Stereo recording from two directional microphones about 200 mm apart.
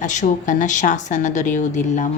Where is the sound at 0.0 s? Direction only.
35° left (ahead or behind).